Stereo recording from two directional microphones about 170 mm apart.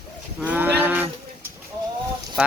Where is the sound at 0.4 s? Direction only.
10° right (ahead or behind).